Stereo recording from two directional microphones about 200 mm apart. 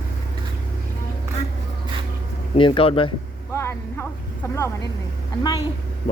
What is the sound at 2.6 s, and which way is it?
Speech, 25° left (ahead or behind).